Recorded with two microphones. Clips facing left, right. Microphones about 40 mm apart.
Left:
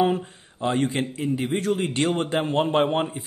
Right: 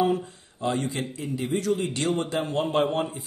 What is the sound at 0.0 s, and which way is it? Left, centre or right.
A man's voice, left.